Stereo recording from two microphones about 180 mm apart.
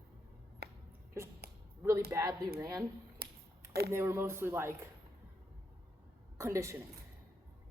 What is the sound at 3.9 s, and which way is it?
Speech, 15° right (ahead or behind).